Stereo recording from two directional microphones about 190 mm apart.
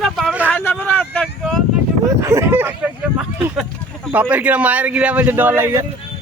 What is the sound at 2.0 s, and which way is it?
Speech, 15° right (ahead or behind).